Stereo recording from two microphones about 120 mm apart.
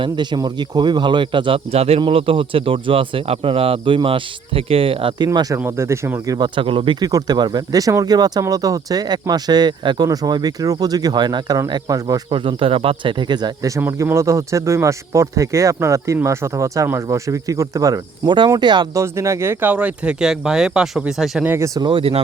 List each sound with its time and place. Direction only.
0.0 s speech: 40° right (ahead or behind)
6.6 s speech: 45° right (ahead or behind)
7.0 s speech: 35° right (ahead or behind)
12.3 s speech: 50° right (ahead or behind)
18.9 s speech: 25° right (ahead or behind); by 21.4 s 5° right (ahead or behind)
21.4 s speech: 20° right (ahead or behind)
21.8 s speech: 45° right (ahead or behind)